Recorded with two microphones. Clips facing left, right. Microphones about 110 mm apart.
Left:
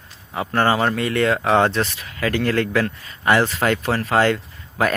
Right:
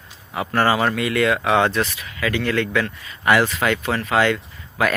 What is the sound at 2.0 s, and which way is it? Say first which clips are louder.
Speech: left 2 dB; 45° left (ahead or behind).